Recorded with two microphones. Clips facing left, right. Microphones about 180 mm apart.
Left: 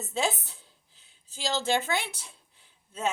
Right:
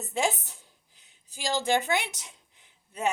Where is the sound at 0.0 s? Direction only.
15° right (ahead or behind).